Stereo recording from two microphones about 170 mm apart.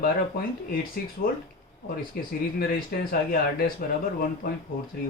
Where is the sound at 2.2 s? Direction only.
60° left (ahead or behind).